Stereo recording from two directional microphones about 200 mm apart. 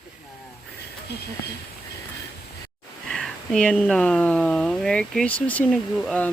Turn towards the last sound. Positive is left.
turn(degrees=5)  # may be behind; listen again after turning